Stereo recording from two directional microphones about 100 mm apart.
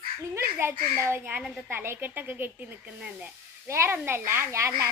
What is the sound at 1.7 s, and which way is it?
Speech, 20° right (ahead or behind).